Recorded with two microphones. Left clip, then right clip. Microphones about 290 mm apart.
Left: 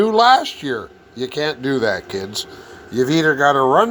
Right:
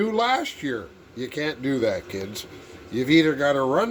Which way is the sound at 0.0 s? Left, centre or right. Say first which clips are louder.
Left 10 dB; centre.